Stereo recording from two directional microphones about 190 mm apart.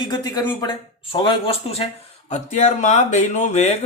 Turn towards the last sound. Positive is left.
turn(degrees=35)  # may be behind; listen again after turning